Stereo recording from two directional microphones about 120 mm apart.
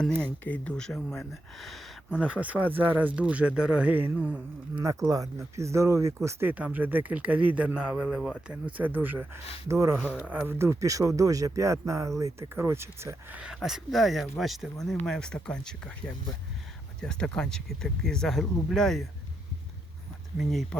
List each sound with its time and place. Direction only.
0.0 s speech: 10° left (ahead or behind)
2.1 s a man's voice: 10° right (ahead or behind)
4.8 s a man's voice: 25° right (ahead or behind); by 8.3 s 5° right (ahead or behind)
8.4 s a man's voice: 15° right (ahead or behind)
10.2 s speech: 15° right (ahead or behind)
13.4 s speech: 5° right (ahead or behind)
20.4 s speech: centre (ahead or behind)